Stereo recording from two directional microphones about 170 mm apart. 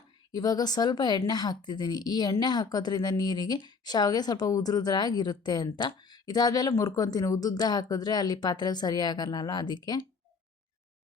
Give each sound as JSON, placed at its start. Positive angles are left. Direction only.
{"t": 0.3, "sound": "a woman's voice", "side_deg": 25}